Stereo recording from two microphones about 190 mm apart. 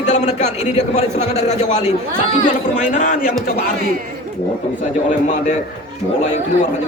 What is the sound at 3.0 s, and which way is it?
Speech, 45° left (ahead or behind).